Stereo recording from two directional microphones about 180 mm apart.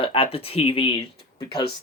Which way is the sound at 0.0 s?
30° left (ahead or behind).